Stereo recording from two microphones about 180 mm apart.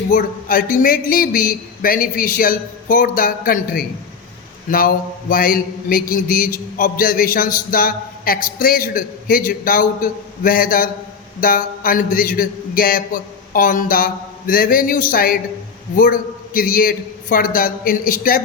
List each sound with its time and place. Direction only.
0.1 s mantra: 50° left (ahead or behind)